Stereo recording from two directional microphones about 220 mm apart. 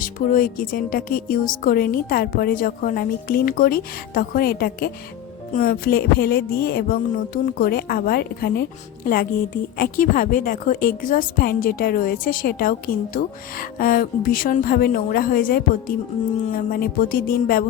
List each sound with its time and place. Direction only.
0.0 s a woman's voice: 40° left (ahead or behind)
5.5 s music: 40° left (ahead or behind)
9.7 s a woman's voice: 40° left (ahead or behind)